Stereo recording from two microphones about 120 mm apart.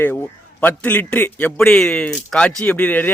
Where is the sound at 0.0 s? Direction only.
15° left (ahead or behind).